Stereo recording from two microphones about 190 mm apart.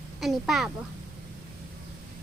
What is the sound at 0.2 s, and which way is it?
Speech, centre (ahead or behind).